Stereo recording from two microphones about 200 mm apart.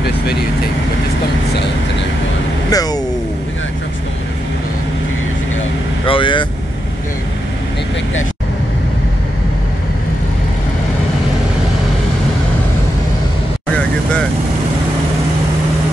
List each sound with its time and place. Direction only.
2.7 s vehicle: 20° left (ahead or behind)
6.0 s vehicle: 25° left (ahead or behind)